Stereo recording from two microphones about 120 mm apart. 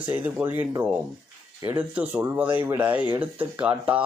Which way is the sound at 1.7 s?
15° right (ahead or behind).